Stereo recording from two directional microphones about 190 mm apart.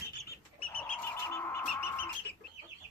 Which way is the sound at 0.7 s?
10° left (ahead or behind).